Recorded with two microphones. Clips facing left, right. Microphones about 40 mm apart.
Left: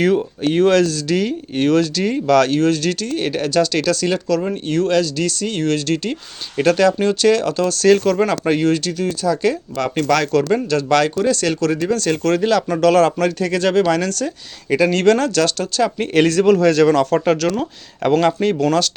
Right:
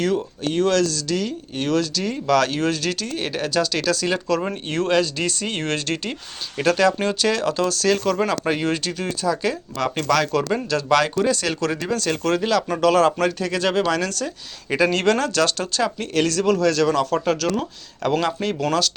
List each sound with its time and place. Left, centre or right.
0.0 s speech: centre
2.2 s speech: centre
4.7 s speech: right
6.6 s speech: centre
8.6 s speech: centre
16.0 s speech: left
16.5 s speech: centre
16.9 s speech: centre
18.2 s speech: centre
18.6 s speech: centre